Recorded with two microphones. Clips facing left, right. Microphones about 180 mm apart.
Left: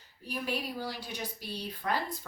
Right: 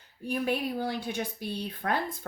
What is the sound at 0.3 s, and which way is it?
A woman's voice, 55° right (ahead or behind).